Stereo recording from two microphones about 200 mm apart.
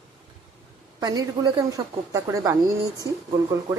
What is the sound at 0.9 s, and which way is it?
A woman's voice, 20° right (ahead or behind).